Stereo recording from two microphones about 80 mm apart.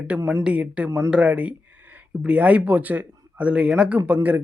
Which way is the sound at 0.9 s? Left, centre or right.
Right.